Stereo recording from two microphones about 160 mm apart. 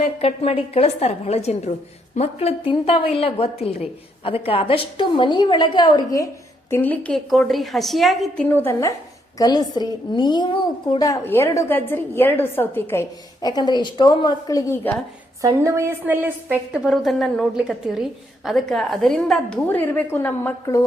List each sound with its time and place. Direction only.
0.0 s a woman's voice: 40° left (ahead or behind); by 6.2 s 25° left (ahead or behind)
6.7 s a woman's voice: 15° left (ahead or behind)
8.4 s a woman's voice: 15° left (ahead or behind)
15.4 s a woman's voice: 20° right (ahead or behind); by 20.8 s 15° left (ahead or behind)